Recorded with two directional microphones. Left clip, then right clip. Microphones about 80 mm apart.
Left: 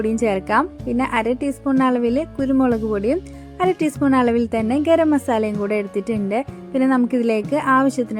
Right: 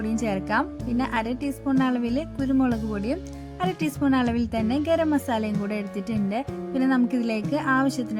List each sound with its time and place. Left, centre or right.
0.0 s speech: left